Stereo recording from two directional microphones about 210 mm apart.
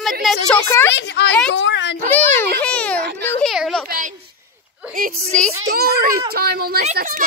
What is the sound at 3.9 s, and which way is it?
Speech, 40° right (ahead or behind).